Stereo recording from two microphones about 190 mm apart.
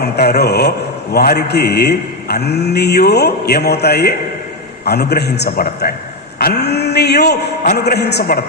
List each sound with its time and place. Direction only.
0.0 s a man's voice: 55° left (ahead or behind)
6.4 s a sound: 60° left (ahead or behind)
7.8 s a man's voice: 60° left (ahead or behind)